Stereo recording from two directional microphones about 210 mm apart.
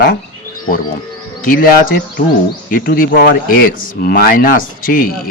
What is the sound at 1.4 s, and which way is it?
A man's voice, 40° left (ahead or behind).